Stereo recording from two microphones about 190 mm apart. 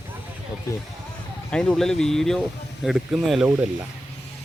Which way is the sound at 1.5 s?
5° left (ahead or behind).